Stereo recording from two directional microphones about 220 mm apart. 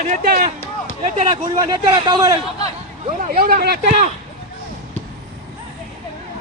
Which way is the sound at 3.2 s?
40° right (ahead or behind).